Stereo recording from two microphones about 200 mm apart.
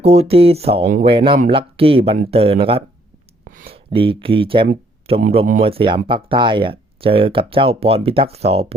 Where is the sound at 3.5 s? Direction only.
45° right (ahead or behind).